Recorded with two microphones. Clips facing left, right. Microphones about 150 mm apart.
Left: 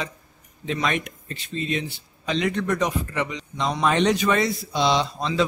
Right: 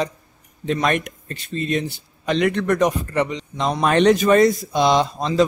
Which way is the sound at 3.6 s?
55° right (ahead or behind).